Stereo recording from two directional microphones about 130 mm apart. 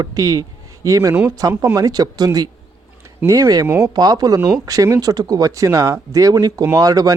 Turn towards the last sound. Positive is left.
turn(degrees=-30)  # may be behind; listen again after turning